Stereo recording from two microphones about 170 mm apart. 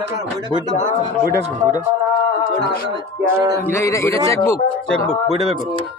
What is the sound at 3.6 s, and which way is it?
Speech, 15° left (ahead or behind).